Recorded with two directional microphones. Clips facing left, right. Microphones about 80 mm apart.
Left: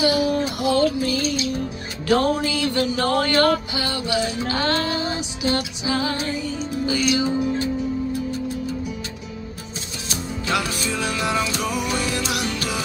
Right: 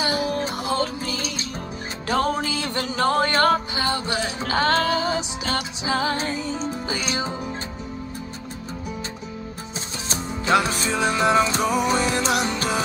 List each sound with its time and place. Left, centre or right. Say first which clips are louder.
0.0 s music: left 4 dB; right
7.1 s speech: left 7 dB; right
10.0 s music: right 3 dB; right